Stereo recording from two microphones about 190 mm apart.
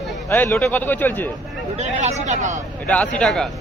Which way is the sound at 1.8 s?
40° right (ahead or behind).